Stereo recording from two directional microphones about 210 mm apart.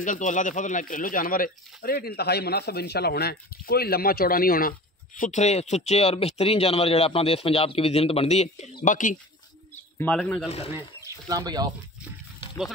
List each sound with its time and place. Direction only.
0.0 s speech: 40° left (ahead or behind)
9.9 s speech: 5° left (ahead or behind)
11.2 s speech: 15° right (ahead or behind)